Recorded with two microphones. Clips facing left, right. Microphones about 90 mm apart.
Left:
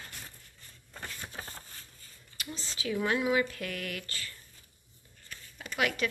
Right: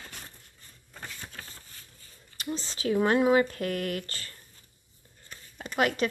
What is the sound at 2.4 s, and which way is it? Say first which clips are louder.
Speech: right 7 dB; 35° right (ahead or behind).